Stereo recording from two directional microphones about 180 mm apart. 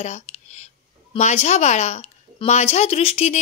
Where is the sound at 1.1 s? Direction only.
35° left (ahead or behind).